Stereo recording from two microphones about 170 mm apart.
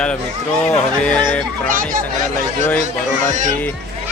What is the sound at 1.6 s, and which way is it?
Speech, 55° right (ahead or behind).